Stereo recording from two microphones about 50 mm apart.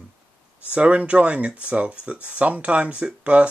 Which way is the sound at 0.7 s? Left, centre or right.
Right.